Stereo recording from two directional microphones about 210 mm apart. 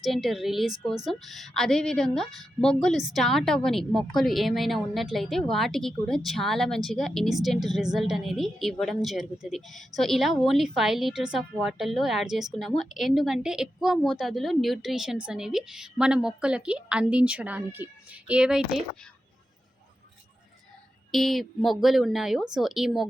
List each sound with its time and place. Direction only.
0.0 s a woman's voice: centre (ahead or behind)
21.1 s a woman's voice: centre (ahead or behind)